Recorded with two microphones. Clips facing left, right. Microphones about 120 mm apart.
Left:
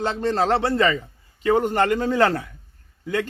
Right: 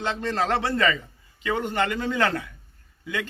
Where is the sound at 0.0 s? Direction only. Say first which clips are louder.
Left 4 dB; 35° left (ahead or behind).